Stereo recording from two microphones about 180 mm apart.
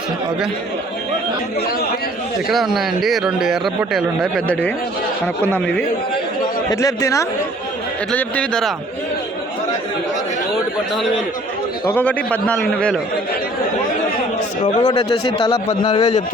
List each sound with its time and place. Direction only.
2.5 s a man's voice: centre (ahead or behind)
6.7 s speech: 20° left (ahead or behind)
8.1 s speech: 5° left (ahead or behind)
11.9 s a man's voice: 10° left (ahead or behind)
14.6 s speech: 35° left (ahead or behind)